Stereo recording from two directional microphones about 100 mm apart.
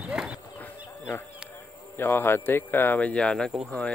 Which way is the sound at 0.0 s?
5° right (ahead or behind).